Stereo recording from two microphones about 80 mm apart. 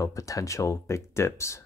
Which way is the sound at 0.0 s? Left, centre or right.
Left.